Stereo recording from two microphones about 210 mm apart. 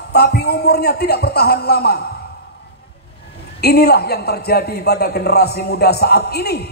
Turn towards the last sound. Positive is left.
turn(degrees=50)  # may be behind; listen again after turning